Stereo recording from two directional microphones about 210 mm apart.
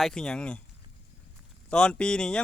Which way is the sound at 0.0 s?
5° left (ahead or behind).